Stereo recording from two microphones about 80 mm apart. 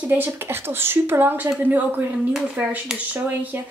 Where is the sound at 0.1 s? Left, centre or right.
Right.